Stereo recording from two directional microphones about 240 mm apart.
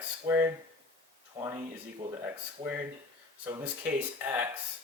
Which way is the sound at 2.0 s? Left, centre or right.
Right.